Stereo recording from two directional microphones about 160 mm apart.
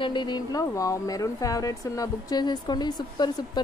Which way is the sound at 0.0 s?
30° left (ahead or behind).